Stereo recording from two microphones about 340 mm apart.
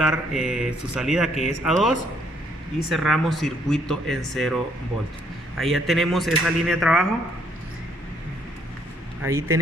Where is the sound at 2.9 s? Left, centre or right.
Centre.